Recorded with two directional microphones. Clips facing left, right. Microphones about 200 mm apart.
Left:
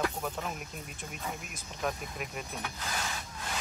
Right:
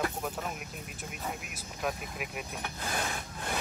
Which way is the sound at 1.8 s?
5° right (ahead or behind).